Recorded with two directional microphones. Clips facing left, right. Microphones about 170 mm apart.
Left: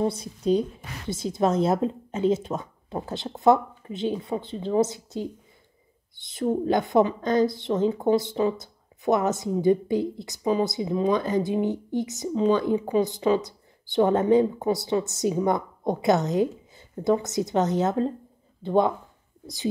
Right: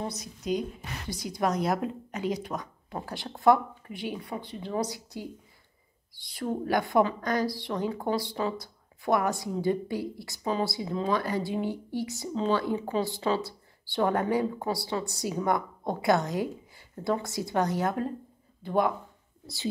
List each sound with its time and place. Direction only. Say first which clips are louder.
0.0 s a woman's voice: left 9 dB; 30° left (ahead or behind)